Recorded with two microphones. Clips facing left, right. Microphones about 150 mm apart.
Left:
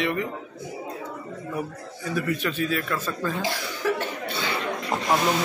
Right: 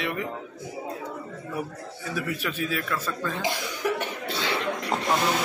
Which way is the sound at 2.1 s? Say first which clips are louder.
Left 4 dB; 5° right (ahead or behind).